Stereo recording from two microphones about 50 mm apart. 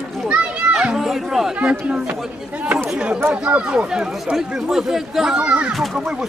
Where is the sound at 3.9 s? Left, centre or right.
Centre.